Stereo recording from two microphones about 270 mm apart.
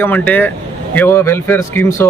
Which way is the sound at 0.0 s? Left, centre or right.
Centre.